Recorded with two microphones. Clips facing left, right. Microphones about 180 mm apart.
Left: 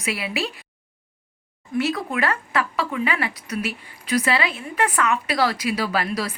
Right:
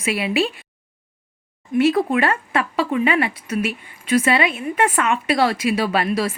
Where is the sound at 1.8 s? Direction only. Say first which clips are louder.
Right 7 dB; 30° right (ahead or behind).